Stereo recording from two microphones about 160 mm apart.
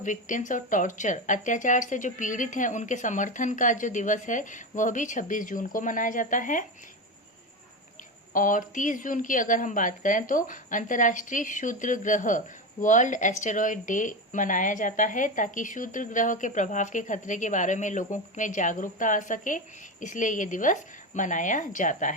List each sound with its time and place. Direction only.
0.0 s a woman's voice: 55° left (ahead or behind)
8.3 s a woman's voice: 55° left (ahead or behind)